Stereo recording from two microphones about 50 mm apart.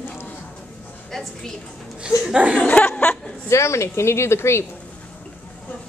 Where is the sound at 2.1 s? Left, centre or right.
Left.